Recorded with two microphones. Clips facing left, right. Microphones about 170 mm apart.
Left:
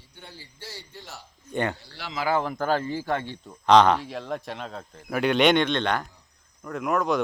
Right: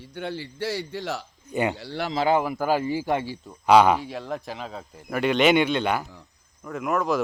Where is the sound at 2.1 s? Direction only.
25° right (ahead or behind).